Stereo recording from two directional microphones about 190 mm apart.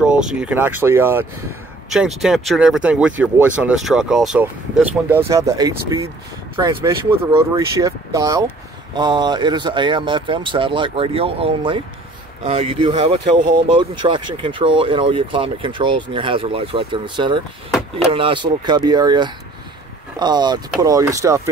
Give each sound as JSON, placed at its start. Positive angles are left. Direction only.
{"t": 0.0, "sound": "speech", "side_deg": -5}
{"t": 1.9, "sound": "speech", "side_deg": 0}